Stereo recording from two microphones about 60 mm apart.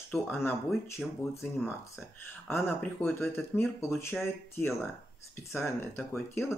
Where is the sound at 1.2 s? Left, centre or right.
Left.